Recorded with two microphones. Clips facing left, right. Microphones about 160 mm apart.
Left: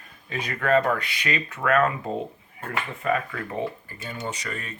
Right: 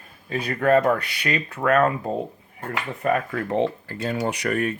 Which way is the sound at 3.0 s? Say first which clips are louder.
Right 4 dB; 45° right (ahead or behind).